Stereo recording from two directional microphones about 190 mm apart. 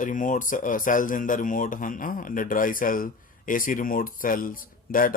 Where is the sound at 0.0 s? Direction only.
45° left (ahead or behind).